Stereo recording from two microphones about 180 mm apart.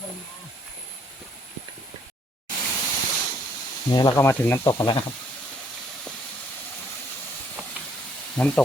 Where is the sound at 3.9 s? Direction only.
20° left (ahead or behind).